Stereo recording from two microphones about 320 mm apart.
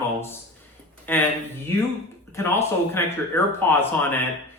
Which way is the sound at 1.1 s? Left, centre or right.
Centre.